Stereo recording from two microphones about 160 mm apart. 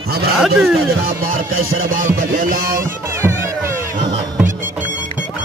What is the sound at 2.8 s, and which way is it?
Music, 15° right (ahead or behind).